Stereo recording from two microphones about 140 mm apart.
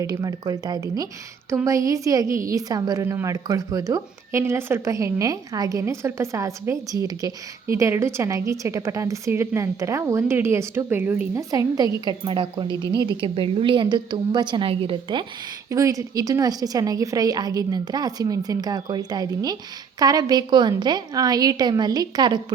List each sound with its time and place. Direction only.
0.0 s speech: 25° right (ahead or behind)
11.3 s a woman's voice: 25° right (ahead or behind)
12.6 s a woman's voice: 25° left (ahead or behind)
13.0 s a woman's voice: 35° right (ahead or behind)
15.7 s speech: 25° right (ahead or behind)